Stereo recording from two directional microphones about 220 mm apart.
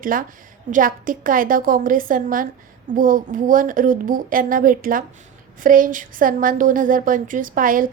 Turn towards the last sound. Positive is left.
turn(degrees=-40)  # may be behind; listen again after turning